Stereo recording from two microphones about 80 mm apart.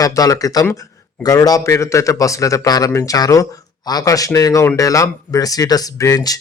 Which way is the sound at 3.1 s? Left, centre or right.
Left.